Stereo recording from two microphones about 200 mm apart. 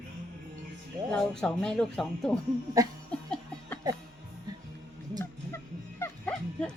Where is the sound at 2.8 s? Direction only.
15° right (ahead or behind).